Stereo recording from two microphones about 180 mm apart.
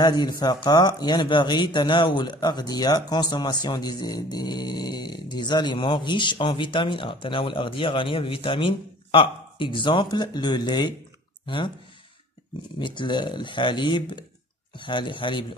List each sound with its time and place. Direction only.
0.0 s speech: 25° left (ahead or behind)
12.7 s speech: 25° left (ahead or behind)